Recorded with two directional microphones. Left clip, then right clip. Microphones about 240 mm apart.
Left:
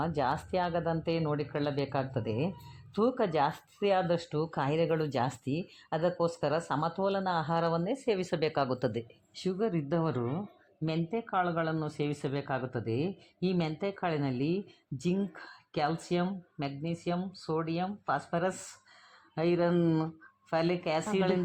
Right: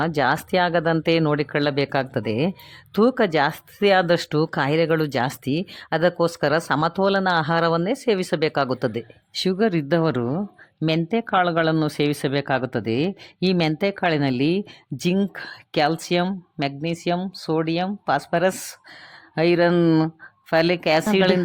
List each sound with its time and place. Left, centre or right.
0.0 s speech: right
9.3 s speech: right